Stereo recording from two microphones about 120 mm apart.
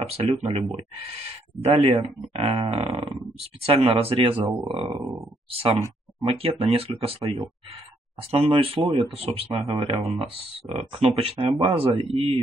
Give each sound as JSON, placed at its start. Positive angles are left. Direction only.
{"t": 0.1, "sound": "speech", "side_deg": -55}